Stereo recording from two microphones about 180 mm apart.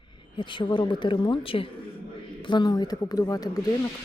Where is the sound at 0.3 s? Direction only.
25° left (ahead or behind).